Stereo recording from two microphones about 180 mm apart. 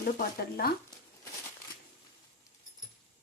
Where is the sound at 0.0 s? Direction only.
55° left (ahead or behind).